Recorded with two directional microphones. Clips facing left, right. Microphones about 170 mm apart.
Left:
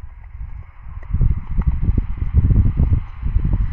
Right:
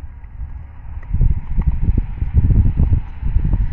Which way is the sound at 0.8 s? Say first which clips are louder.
Even; 60° right (ahead or behind).